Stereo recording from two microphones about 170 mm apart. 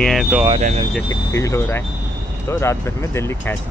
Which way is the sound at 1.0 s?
20° left (ahead or behind).